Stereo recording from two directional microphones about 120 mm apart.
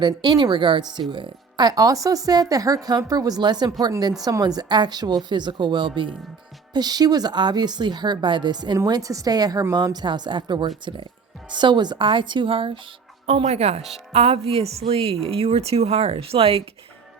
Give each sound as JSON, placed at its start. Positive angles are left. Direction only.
{"t": 0.0, "sound": "speech", "side_deg": -40}
{"t": 13.2, "sound": "speech", "side_deg": -60}